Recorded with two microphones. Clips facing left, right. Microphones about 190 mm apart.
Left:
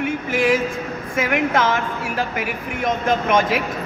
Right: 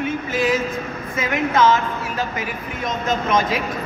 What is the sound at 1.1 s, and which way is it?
Speech, 55° left (ahead or behind).